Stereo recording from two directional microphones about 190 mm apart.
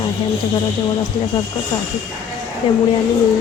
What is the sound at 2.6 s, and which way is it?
Speech, 25° left (ahead or behind).